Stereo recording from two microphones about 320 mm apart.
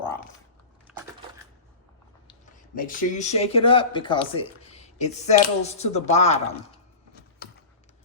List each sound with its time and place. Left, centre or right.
2.7 s speech: left